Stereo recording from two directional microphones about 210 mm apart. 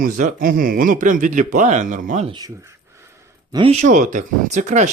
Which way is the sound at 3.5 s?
30° right (ahead or behind).